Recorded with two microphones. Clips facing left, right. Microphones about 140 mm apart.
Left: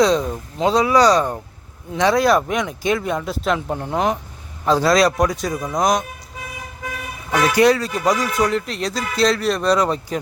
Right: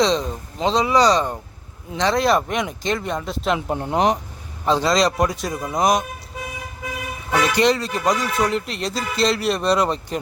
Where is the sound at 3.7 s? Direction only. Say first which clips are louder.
Right 1 dB; 20° right (ahead or behind).